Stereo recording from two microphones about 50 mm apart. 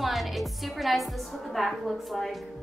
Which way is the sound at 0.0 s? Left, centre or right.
Centre.